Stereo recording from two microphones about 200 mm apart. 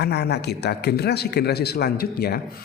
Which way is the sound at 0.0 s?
55° left (ahead or behind).